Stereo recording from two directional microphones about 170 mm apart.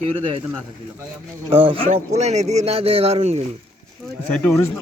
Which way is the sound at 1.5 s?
30° right (ahead or behind).